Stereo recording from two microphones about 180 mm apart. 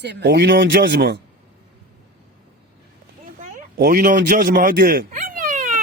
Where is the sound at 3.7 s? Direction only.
55° right (ahead or behind).